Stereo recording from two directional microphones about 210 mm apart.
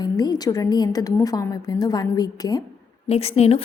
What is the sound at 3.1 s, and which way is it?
Speech, 30° left (ahead or behind).